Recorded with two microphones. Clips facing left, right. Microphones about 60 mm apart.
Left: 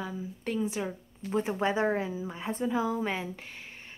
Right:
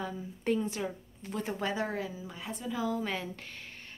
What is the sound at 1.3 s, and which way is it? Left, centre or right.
A woman's voice, left.